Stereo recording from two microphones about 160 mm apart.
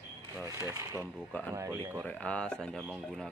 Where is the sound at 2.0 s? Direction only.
10° left (ahead or behind).